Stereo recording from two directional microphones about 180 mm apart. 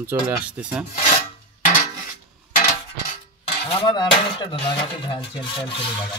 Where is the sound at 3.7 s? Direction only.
25° left (ahead or behind).